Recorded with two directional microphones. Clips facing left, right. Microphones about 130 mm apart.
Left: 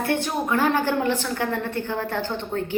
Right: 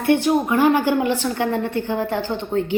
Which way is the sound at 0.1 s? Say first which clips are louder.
Right 9 dB; 15° right (ahead or behind).